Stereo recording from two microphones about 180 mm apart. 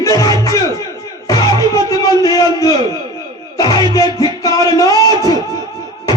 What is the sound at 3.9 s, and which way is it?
Music, 20° left (ahead or behind).